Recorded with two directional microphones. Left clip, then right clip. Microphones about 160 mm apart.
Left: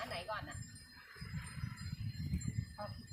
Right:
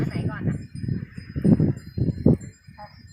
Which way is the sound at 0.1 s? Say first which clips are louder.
Right 8 dB; 25° left (ahead or behind).